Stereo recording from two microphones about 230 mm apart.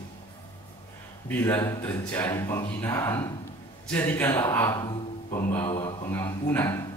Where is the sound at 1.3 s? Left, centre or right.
Centre.